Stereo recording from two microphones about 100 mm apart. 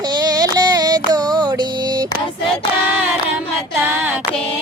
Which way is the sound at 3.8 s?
20° right (ahead or behind).